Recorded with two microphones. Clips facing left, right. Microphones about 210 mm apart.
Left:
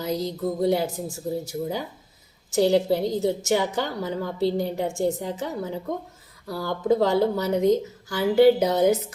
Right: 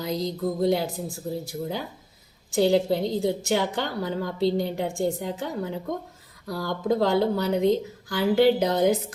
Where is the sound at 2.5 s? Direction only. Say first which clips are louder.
Left 1 dB; centre (ahead or behind).